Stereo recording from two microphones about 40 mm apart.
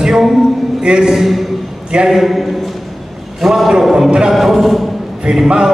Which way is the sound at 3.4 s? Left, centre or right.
Centre.